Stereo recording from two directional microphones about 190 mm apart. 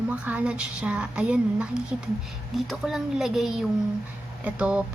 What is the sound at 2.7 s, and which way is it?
A woman's voice, centre (ahead or behind).